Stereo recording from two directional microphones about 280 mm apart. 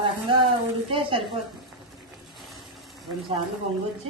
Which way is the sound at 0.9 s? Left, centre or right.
Centre.